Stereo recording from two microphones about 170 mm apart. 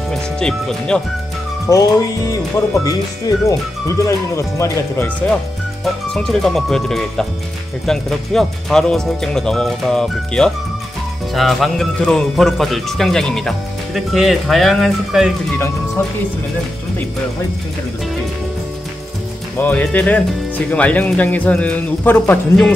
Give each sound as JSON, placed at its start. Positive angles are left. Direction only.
{"t": 0.1, "sound": "speech", "side_deg": 5}
{"t": 1.7, "sound": "music", "side_deg": 20}
{"t": 2.7, "sound": "speech", "side_deg": 20}
{"t": 19.6, "sound": "speech", "side_deg": 10}